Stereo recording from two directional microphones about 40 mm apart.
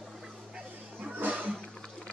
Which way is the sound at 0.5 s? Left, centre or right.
Right.